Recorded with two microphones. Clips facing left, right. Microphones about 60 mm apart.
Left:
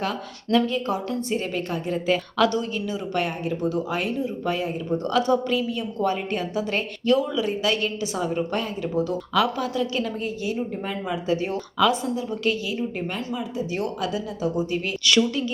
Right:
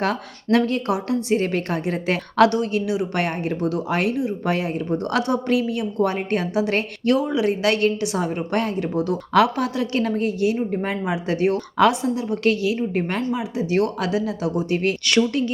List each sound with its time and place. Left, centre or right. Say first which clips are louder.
0.5 s a woman's voice: right 3 dB; right
15.0 s speech: right 2 dB; right